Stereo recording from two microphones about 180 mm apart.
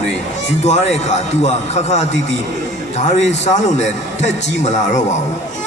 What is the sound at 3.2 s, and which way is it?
A man's voice, 40° left (ahead or behind).